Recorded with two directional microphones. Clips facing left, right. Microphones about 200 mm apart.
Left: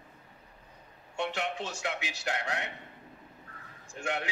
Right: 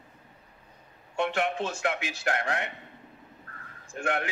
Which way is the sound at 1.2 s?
55° right (ahead or behind).